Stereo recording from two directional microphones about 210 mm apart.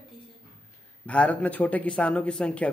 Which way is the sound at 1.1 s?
5° left (ahead or behind).